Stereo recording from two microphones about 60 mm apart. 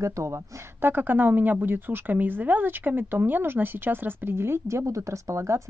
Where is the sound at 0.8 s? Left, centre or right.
Right.